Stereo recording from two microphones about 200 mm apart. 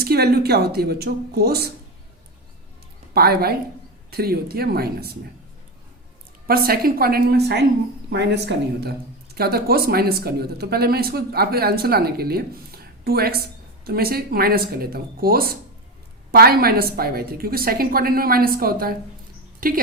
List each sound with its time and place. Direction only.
0.0 s speech: 50° right (ahead or behind)
3.2 s speech: 50° right (ahead or behind)
6.5 s speech: 50° right (ahead or behind)